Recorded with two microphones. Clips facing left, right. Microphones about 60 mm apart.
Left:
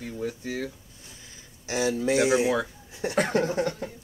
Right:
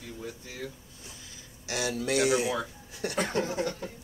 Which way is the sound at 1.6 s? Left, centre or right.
Left.